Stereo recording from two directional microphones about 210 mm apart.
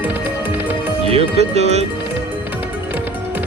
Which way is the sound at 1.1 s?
30° right (ahead or behind).